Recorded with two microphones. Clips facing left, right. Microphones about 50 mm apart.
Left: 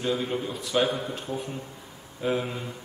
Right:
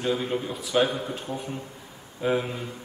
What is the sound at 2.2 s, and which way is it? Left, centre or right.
Speech, centre.